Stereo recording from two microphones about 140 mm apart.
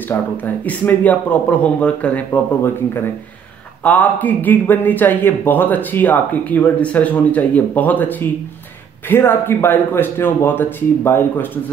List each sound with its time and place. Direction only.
0.1 s speech: 10° left (ahead or behind)